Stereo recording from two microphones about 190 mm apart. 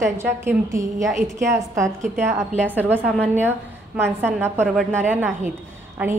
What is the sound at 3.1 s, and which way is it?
Speech, 5° left (ahead or behind).